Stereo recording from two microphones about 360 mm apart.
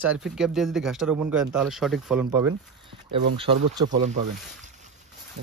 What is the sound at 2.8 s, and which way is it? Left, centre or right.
Speech, centre.